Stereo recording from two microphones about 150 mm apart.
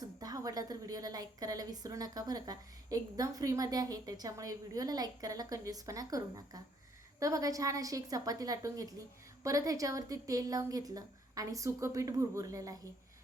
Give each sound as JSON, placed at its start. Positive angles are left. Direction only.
{"t": 0.0, "sound": "a woman's voice", "side_deg": -25}